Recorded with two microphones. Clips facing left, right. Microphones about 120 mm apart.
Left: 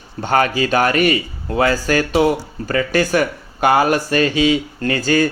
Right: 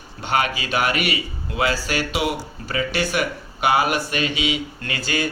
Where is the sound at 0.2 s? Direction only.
40° left (ahead or behind).